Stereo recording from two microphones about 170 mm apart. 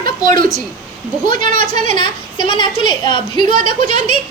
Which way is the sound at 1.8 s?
25° left (ahead or behind).